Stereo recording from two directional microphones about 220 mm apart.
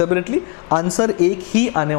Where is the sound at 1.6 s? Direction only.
20° left (ahead or behind).